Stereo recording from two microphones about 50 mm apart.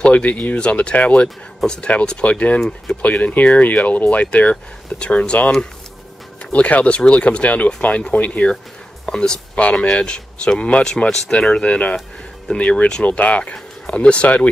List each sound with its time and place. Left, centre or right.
0.0 s speech: left
4.9 s speech: centre
6.4 s speech: left
9.0 s speech: centre
9.6 s speech: left
13.0 s speech: left